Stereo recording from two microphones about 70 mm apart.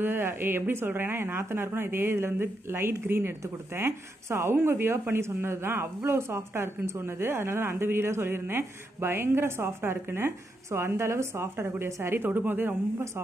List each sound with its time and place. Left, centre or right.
0.0 s speech: right